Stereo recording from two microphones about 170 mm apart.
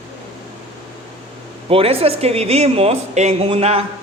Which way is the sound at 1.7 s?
35° right (ahead or behind).